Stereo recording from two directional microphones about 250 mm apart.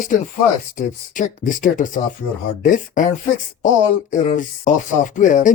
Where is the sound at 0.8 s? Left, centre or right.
Left.